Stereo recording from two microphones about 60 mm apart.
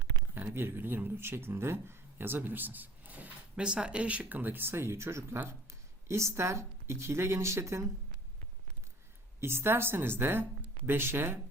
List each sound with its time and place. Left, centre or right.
0.3 s speech: right
3.5 s speech: centre; by 7.9 s right
9.4 s speech: right